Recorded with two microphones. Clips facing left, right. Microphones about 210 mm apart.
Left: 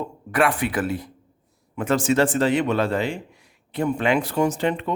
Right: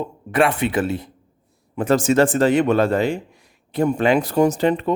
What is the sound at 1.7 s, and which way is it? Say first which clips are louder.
A man's voice: right 4 dB; 35° right (ahead or behind).